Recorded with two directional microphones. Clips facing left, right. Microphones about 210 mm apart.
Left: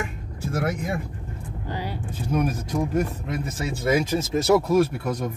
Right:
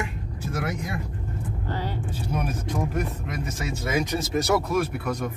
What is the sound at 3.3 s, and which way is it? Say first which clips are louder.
Speech: left 2 dB; 30° left (ahead or behind).